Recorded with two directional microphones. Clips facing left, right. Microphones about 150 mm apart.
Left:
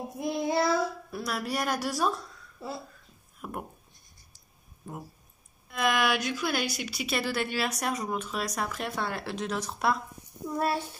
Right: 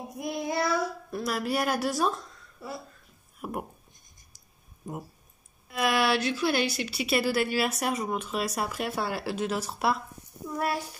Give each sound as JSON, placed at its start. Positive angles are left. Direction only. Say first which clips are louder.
{"t": 0.2, "sound": "child singing", "louder": "left 2 dB", "side_deg": 25}
{"t": 1.1, "sound": "a woman's voice", "louder": "right 6 dB", "side_deg": 0}
{"t": 2.6, "sound": "speech", "louder": "left 1 dB", "side_deg": 25}
{"t": 3.3, "sound": "speech", "louder": "right 3 dB", "side_deg": -15}
{"t": 4.3, "sound": "a sound", "louder": "even", "side_deg": -15}
{"t": 4.9, "sound": "speech", "louder": "right 3 dB", "side_deg": -15}
{"t": 5.7, "sound": "speech", "louder": "right 1 dB", "side_deg": -5}
{"t": 6.1, "sound": "speech", "louder": "right 4 dB", "side_deg": 10}
{"t": 6.9, "sound": "a woman's voice", "louder": "right 4 dB", "side_deg": -5}
{"t": 10.6, "sound": "a child's voice", "louder": "left 1 dB", "side_deg": 30}